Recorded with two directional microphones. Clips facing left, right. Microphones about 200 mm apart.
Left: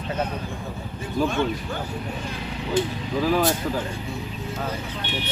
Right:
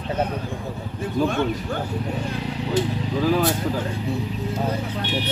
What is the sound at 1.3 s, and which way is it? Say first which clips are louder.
Speech: right 2 dB; 55° right (ahead or behind).